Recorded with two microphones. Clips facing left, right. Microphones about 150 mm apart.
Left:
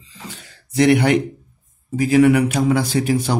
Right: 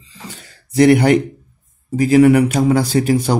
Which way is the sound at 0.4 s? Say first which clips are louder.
Right 4 dB; 40° right (ahead or behind).